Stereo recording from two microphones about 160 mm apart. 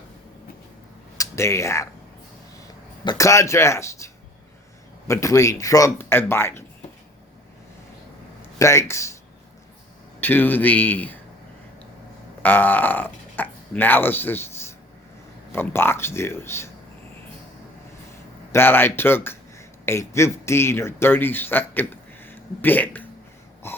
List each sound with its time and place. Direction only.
1.2 s speech: 20° left (ahead or behind)
3.0 s speech: 25° left (ahead or behind)
8.5 s speech: 20° left (ahead or behind)
10.2 s speech: 10° left (ahead or behind)
12.4 s speech: 10° left (ahead or behind)
18.5 s speech: 15° left (ahead or behind)
23.6 s wheeze: 15° left (ahead or behind)